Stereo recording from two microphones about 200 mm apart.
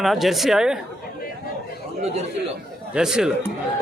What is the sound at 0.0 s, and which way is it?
Speech, centre (ahead or behind).